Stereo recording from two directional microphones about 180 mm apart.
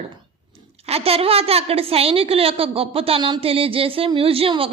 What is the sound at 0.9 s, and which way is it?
A woman's voice, 35° right (ahead or behind).